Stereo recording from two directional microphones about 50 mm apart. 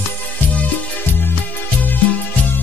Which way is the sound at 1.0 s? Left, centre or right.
Left.